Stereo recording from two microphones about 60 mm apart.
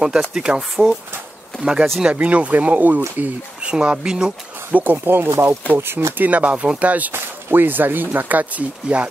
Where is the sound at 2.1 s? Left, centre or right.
Right.